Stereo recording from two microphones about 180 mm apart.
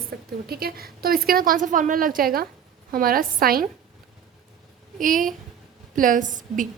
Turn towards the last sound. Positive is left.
turn(degrees=-45)  # may be behind; listen again after turning